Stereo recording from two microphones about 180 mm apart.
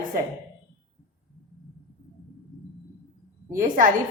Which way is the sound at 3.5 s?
50° right (ahead or behind).